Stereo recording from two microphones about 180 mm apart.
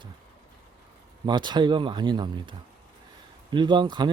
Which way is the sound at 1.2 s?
25° right (ahead or behind).